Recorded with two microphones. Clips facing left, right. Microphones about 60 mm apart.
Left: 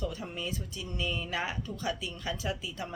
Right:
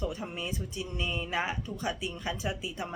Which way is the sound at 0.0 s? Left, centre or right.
Right.